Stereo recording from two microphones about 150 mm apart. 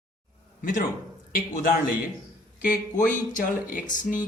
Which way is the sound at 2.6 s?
60° left (ahead or behind).